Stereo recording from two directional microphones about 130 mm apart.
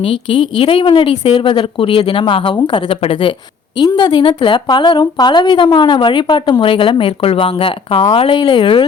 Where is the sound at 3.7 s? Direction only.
35° left (ahead or behind).